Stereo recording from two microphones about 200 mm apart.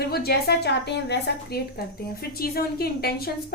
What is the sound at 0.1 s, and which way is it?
A woman's voice, 50° left (ahead or behind).